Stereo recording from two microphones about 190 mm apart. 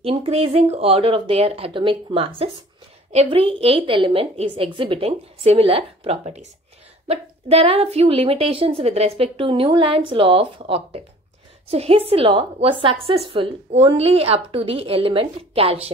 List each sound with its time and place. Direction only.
0.0 s a woman's voice: 30° right (ahead or behind)